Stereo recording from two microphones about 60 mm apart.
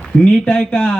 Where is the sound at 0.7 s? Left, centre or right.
Left.